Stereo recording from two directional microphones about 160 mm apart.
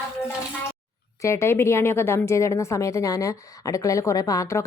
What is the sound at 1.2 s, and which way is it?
A woman's voice, 15° left (ahead or behind).